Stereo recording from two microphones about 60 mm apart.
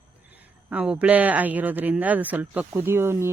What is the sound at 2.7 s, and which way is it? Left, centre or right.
Speech, right.